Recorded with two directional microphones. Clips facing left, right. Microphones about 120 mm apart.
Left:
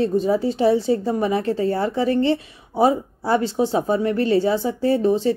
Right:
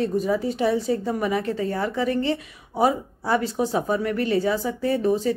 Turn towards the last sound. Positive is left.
turn(degrees=30)  # may be behind; listen again after turning